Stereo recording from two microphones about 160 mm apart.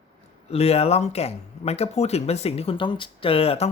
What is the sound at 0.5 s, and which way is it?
Speech, 40° left (ahead or behind).